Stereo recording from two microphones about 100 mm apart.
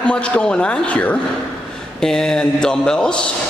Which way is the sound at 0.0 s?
10° left (ahead or behind).